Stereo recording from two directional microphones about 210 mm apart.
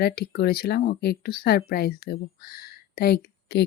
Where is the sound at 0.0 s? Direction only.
50° left (ahead or behind).